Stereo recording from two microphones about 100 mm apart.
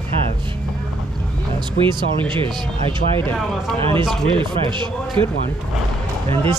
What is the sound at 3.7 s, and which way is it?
Speech, 65° right (ahead or behind).